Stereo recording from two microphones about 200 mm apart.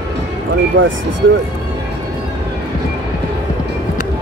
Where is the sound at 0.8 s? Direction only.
70° right (ahead or behind).